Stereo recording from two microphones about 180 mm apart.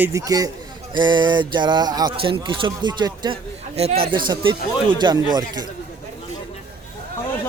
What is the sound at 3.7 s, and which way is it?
Speech, 35° right (ahead or behind).